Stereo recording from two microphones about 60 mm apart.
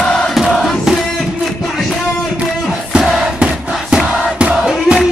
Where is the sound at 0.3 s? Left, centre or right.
Centre.